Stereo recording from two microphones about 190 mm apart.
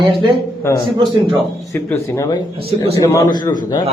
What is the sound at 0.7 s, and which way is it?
Speech, 15° left (ahead or behind).